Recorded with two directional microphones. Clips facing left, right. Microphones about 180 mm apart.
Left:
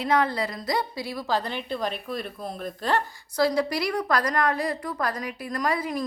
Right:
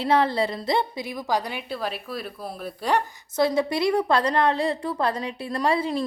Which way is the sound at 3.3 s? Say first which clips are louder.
Right 1 dB; 25° right (ahead or behind).